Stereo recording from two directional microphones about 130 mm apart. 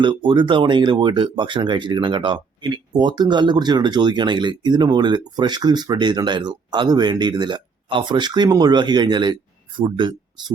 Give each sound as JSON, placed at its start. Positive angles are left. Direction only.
{"t": 0.0, "sound": "speech", "side_deg": -40}